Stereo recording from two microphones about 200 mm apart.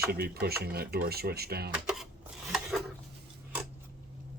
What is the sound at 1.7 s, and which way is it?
Dishes, 5° right (ahead or behind).